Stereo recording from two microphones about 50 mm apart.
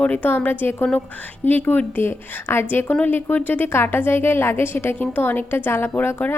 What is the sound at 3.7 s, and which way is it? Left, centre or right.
A woman's voice, left.